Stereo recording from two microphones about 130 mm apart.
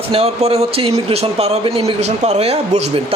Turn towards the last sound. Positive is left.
turn(degrees=-55)  # may be behind; listen again after turning